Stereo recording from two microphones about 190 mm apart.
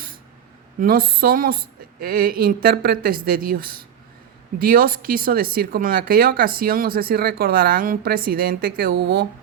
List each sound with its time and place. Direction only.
0.8 s speech: 50° right (ahead or behind)